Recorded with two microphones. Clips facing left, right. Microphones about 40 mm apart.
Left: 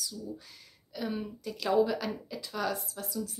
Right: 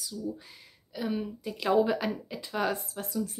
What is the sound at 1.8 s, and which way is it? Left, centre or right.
Speech, right.